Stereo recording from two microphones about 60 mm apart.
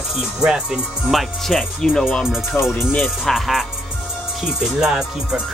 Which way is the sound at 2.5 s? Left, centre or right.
Left.